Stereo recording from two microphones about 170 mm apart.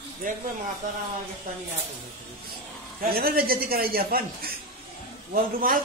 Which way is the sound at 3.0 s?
60° right (ahead or behind).